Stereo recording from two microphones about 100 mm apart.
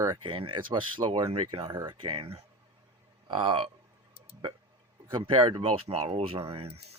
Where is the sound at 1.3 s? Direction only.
70° right (ahead or behind).